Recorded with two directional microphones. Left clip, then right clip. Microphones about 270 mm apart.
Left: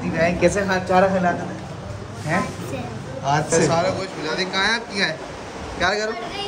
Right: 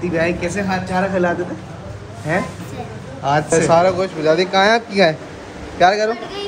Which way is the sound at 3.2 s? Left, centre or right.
Centre.